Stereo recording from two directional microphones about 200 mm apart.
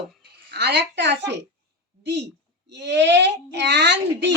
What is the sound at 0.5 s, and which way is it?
Speech, 55° right (ahead or behind).